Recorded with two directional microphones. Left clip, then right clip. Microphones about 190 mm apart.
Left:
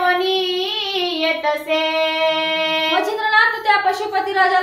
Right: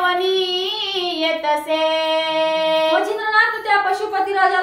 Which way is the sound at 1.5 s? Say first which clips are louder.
Right 1 dB; 15° right (ahead or behind).